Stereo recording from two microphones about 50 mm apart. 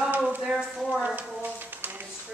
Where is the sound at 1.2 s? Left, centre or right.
Right.